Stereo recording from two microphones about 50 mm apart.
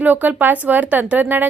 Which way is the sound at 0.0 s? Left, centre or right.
Right.